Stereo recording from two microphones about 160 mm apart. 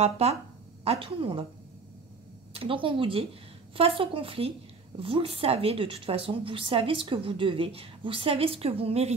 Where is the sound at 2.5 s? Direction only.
35° right (ahead or behind).